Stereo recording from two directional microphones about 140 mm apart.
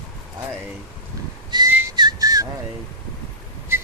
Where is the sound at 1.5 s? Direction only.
30° right (ahead or behind).